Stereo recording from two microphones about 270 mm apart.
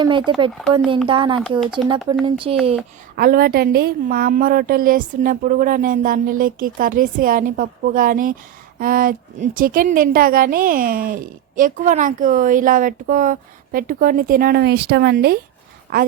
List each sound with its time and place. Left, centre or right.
0.3 s speech: centre
3.2 s a woman's voice: right